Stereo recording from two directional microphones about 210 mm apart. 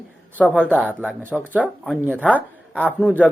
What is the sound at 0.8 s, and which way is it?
Speech, 10° right (ahead or behind).